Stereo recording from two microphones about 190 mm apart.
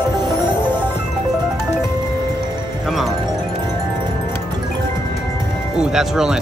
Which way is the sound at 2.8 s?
Centre (ahead or behind).